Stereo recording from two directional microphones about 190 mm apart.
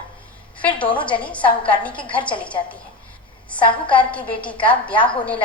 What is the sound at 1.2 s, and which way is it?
A woman's voice, 5° left (ahead or behind).